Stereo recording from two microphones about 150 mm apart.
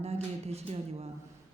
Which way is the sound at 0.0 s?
45° right (ahead or behind).